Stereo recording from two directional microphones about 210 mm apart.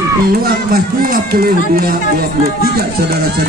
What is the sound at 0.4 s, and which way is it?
Speech, 45° right (ahead or behind).